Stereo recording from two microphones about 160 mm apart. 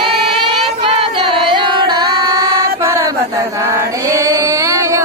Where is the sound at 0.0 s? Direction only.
35° right (ahead or behind).